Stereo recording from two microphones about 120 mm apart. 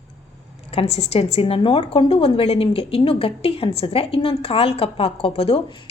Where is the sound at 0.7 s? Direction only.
60° left (ahead or behind).